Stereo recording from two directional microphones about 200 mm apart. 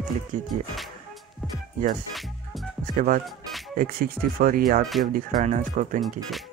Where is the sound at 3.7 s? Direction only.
45° right (ahead or behind).